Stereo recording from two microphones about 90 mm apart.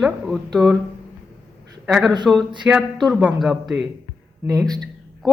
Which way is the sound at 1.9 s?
5° right (ahead or behind).